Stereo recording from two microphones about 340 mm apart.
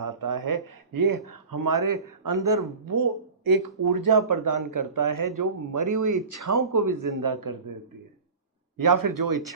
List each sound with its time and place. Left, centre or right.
0.0 s speech: right
3.8 s speech: right
8.8 s speech: right